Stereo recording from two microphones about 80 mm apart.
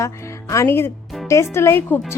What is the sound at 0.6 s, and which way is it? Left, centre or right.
A woman's voice, left.